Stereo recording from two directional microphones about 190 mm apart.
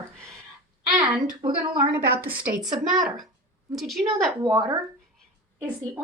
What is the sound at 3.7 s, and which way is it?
Speech, centre (ahead or behind).